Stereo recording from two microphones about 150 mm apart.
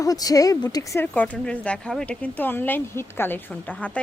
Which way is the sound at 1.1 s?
10° left (ahead or behind).